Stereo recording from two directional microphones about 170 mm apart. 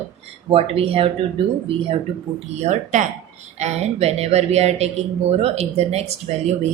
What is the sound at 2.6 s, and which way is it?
A woman's voice, 45° right (ahead or behind).